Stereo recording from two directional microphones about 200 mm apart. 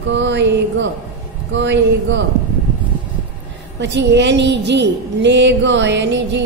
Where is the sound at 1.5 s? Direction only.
65° right (ahead or behind).